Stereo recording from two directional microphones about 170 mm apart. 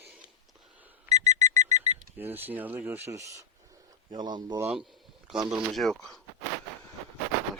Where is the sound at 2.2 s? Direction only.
10° right (ahead or behind).